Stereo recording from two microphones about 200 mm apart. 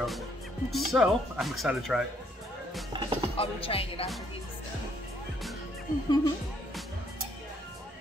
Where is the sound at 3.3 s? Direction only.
30° left (ahead or behind).